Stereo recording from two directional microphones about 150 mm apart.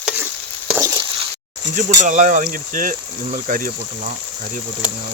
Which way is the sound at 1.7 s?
55° right (ahead or behind).